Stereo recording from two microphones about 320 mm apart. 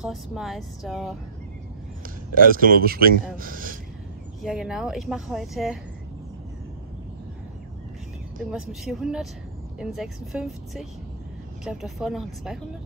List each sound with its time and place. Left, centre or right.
0.0 s speech: centre
2.3 s speech: right
4.4 s speech: centre
8.5 s speech: centre